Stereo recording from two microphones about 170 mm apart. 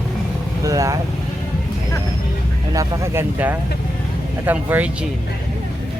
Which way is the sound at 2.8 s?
15° right (ahead or behind).